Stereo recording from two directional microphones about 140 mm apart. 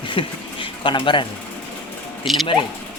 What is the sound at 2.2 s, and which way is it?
Speech, centre (ahead or behind).